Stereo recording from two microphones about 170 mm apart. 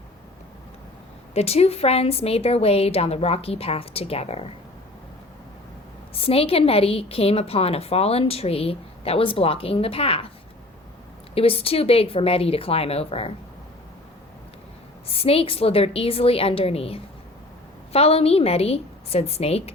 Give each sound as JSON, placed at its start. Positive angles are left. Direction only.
{"t": 1.3, "sound": "a woman's voice", "side_deg": 35}
{"t": 6.1, "sound": "a woman's voice", "side_deg": 35}
{"t": 11.3, "sound": "a woman's voice", "side_deg": 35}
{"t": 15.0, "sound": "a woman's voice", "side_deg": 35}